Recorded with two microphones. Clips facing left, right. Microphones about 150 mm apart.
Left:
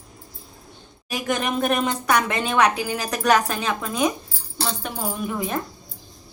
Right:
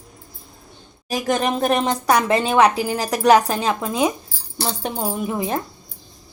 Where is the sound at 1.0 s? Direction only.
35° right (ahead or behind).